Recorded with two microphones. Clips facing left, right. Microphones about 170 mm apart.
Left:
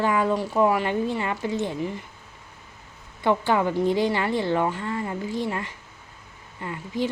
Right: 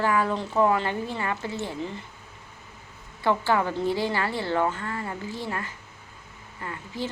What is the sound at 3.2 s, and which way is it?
A woman's voice, 15° left (ahead or behind).